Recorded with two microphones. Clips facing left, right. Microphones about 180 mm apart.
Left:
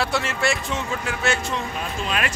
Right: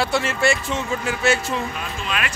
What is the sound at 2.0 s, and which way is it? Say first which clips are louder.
Speech: left 1 dB; 35° left (ahead or behind).